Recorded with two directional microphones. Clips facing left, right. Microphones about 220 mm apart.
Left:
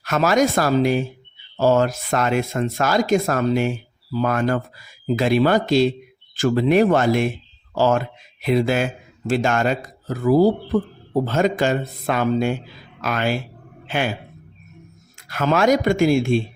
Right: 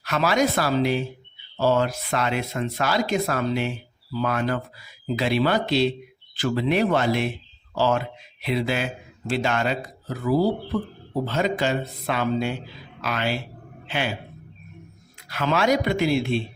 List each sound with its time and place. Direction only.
0.0 s a man's voice: 45° left (ahead or behind)
15.3 s speech: 45° left (ahead or behind)